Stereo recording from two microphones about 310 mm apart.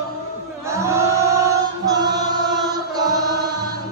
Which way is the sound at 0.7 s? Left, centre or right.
Centre.